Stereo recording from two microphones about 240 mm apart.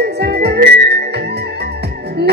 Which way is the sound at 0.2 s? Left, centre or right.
Right.